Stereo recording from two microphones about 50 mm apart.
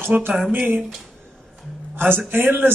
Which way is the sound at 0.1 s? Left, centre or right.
Centre.